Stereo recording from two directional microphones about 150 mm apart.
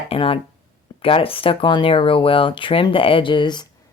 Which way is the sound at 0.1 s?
40° left (ahead or behind).